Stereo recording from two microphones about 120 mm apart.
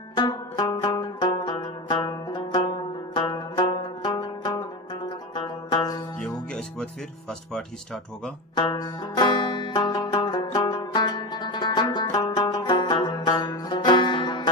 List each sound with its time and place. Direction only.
0.2 s music: 35° left (ahead or behind)
6.1 s music: 10° left (ahead or behind)
8.5 s banjo: 35° left (ahead or behind)